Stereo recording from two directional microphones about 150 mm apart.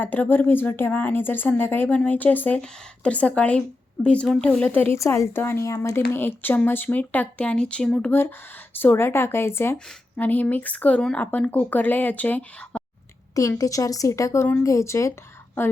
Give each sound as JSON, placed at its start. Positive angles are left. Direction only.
{"t": 0.0, "sound": "a woman's voice", "side_deg": 10}
{"t": 13.3, "sound": "speech", "side_deg": 20}